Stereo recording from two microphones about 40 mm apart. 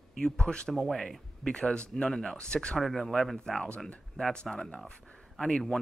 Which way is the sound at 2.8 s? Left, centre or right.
Centre.